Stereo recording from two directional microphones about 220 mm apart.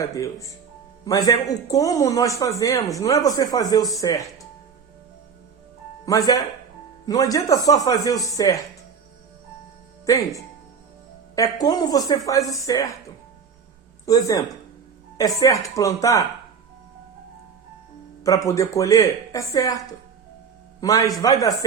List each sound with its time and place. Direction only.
0.0 s speech: 15° left (ahead or behind)
6.1 s speech: 15° left (ahead or behind)
10.1 s speech: 15° left (ahead or behind)
14.0 s speech: 15° left (ahead or behind)
18.2 s speech: 15° left (ahead or behind)
20.8 s speech: 15° left (ahead or behind)